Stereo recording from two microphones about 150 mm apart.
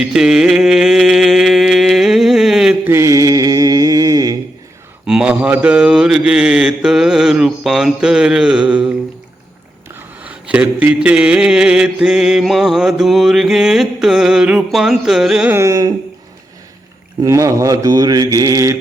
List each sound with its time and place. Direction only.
0.0 s mantra: 5° right (ahead or behind)
2.9 s mantra: 20° right (ahead or behind)
5.0 s mantra: 5° right (ahead or behind)
10.2 s mantra: 10° right (ahead or behind)
15.5 s mantra: 20° right (ahead or behind)
17.2 s mantra: 20° right (ahead or behind)